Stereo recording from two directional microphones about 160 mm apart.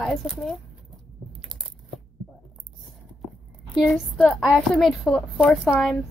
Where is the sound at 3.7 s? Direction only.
Centre (ahead or behind).